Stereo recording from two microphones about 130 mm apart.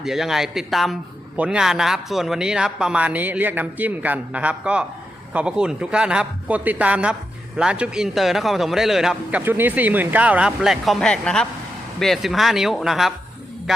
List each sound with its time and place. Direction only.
0.0 s a man's voice: centre (ahead or behind)
9.4 s a man's voice: 15° right (ahead or behind)